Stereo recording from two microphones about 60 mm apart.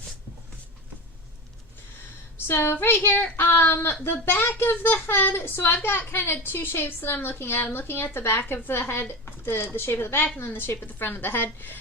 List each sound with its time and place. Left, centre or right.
2.5 s a woman's voice: left